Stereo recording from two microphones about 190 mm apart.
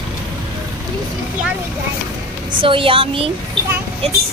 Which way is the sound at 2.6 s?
30° right (ahead or behind).